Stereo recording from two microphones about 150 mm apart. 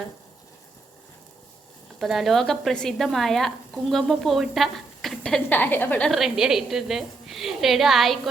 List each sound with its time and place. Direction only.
2.0 s speech: centre (ahead or behind)
6.1 s speech: centre (ahead or behind)